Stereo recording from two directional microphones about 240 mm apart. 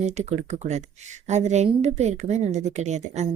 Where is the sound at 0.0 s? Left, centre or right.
Right.